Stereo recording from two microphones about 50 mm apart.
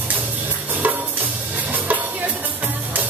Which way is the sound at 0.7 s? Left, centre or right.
Right.